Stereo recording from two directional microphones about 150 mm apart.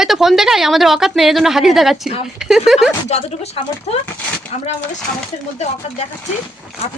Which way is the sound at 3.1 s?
45° left (ahead or behind).